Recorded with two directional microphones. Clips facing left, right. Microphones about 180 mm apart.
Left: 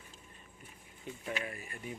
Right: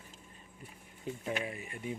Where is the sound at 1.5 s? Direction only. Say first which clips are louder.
Right 4 dB; 20° right (ahead or behind).